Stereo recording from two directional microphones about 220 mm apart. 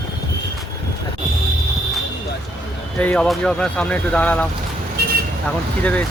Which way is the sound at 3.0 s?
5° left (ahead or behind).